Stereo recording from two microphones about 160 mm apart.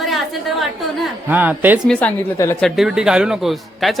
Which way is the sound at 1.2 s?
10° right (ahead or behind).